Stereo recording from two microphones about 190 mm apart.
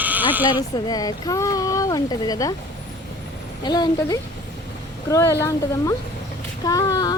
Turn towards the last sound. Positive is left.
turn(degrees=20)  # may be behind; listen again after turning